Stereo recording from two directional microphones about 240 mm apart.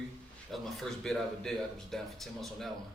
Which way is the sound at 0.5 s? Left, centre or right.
Centre.